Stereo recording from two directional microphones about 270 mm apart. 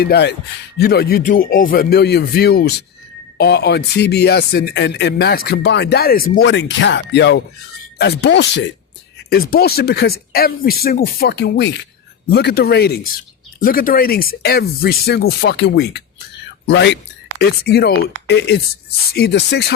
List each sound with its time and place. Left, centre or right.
0.0 s speech: left